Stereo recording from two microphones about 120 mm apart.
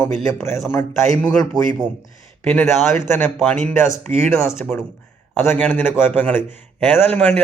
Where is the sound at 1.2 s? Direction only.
10° left (ahead or behind).